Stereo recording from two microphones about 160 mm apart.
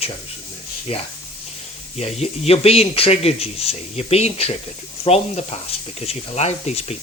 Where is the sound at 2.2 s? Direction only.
40° left (ahead or behind).